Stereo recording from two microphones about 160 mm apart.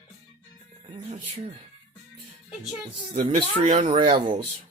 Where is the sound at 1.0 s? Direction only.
40° right (ahead or behind).